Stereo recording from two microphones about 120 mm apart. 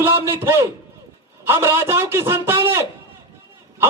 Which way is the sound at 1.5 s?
20° right (ahead or behind).